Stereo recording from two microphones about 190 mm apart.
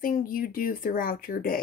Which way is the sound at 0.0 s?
45° left (ahead or behind).